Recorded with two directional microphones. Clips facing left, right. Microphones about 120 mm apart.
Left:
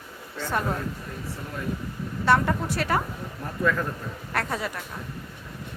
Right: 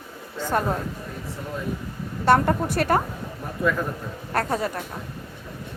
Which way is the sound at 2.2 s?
50° right (ahead or behind).